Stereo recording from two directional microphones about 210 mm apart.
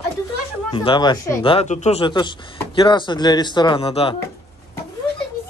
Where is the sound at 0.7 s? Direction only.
25° left (ahead or behind).